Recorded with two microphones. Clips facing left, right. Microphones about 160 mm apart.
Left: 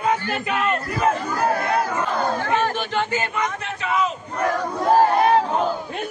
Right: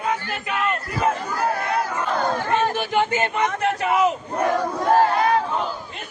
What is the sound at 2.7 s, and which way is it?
Speech, 15° right (ahead or behind).